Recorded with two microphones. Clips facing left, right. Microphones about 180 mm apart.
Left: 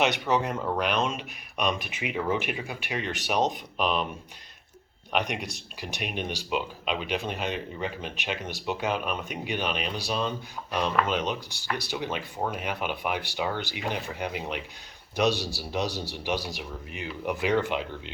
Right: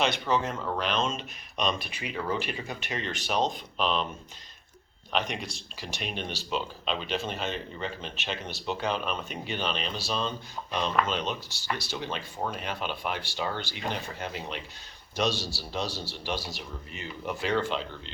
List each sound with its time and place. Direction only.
0.0 s speech: 15° left (ahead or behind)
5.1 s speech: 15° left (ahead or behind)